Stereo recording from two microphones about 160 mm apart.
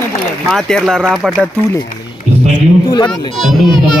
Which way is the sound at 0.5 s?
Centre (ahead or behind).